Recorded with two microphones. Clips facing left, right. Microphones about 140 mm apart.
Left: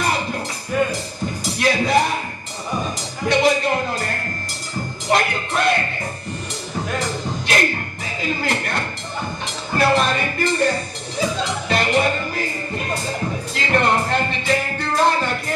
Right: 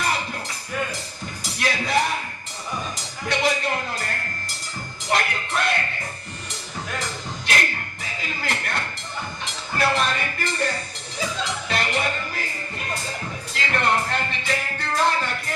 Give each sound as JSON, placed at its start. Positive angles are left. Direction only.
{"t": 0.0, "sound": "music", "side_deg": 30}
{"t": 3.3, "sound": "music", "side_deg": 30}
{"t": 5.1, "sound": "music", "side_deg": 30}
{"t": 6.9, "sound": "music", "side_deg": 35}
{"t": 8.2, "sound": "music", "side_deg": 30}